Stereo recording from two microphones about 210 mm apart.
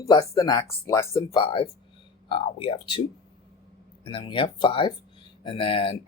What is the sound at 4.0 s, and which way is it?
Speech, 25° left (ahead or behind).